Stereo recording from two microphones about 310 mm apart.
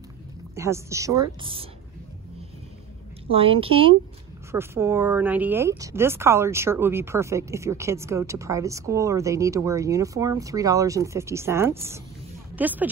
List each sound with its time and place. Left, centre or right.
0.6 s speech: centre
3.3 s speech: centre